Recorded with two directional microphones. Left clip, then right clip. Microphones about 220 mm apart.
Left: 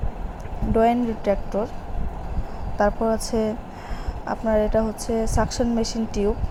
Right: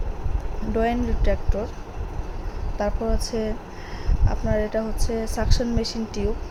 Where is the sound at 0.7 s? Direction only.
15° left (ahead or behind).